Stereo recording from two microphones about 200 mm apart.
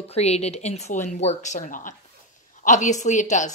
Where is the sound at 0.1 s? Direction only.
30° left (ahead or behind).